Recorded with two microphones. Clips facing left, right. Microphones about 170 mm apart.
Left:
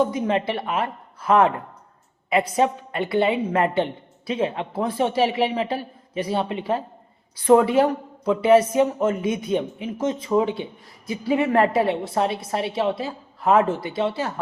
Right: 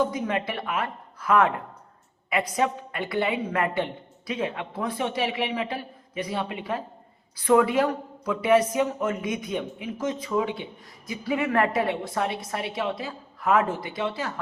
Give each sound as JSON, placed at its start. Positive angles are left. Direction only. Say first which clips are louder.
{"t": 0.0, "sound": "speech", "louder": "left 4 dB", "side_deg": 25}
{"t": 2.6, "sound": "speech", "louder": "left 5 dB", "side_deg": 25}